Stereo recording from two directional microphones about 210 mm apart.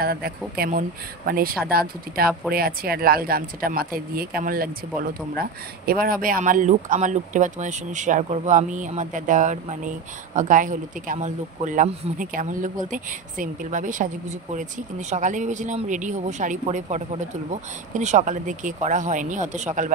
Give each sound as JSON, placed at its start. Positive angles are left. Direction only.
{"t": 0.0, "sound": "speech", "side_deg": -45}